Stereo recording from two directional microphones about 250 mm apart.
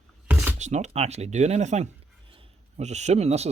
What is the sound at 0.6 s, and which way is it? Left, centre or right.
Speech, right.